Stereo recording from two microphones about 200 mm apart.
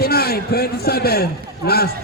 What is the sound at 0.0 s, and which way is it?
A man's voice, 50° left (ahead or behind).